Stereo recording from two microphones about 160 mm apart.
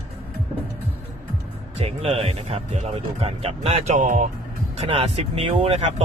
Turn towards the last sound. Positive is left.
turn(degrees=-40)  # may be behind; listen again after turning